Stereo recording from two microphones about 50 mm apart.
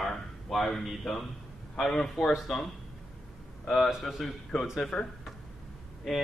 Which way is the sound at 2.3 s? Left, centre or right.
Centre.